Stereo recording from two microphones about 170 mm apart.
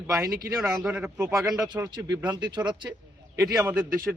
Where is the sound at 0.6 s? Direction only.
5° right (ahead or behind).